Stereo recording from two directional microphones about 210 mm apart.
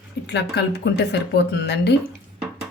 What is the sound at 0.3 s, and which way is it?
Speech, 55° left (ahead or behind).